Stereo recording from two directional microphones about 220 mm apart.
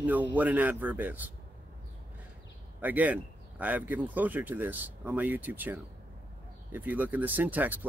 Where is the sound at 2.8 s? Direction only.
5° right (ahead or behind).